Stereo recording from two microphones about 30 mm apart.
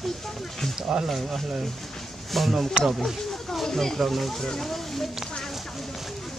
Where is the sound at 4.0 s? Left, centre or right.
Centre.